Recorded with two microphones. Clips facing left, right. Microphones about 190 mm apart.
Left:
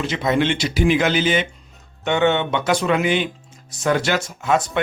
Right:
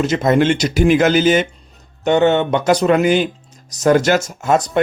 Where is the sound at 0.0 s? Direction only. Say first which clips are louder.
Right 6 dB; 45° right (ahead or behind).